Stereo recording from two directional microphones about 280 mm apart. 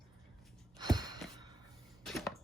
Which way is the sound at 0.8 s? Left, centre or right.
Centre.